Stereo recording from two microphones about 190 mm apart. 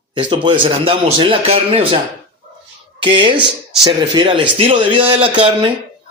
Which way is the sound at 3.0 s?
25° right (ahead or behind).